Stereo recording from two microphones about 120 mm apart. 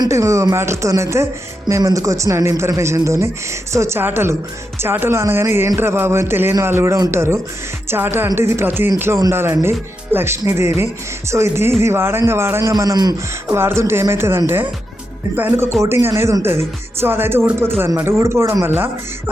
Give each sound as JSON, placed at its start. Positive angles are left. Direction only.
{"t": 0.0, "sound": "speech", "side_deg": -25}
{"t": 12.7, "sound": "speech", "side_deg": -30}
{"t": 13.6, "sound": "speech", "side_deg": -20}